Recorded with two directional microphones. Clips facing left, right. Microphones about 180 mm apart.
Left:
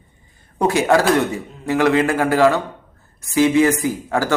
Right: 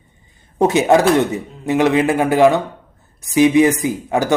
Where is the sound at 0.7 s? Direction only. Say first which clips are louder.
Right 2 dB; 20° right (ahead or behind).